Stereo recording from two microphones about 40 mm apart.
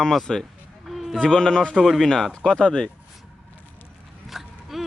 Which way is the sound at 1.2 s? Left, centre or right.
Centre.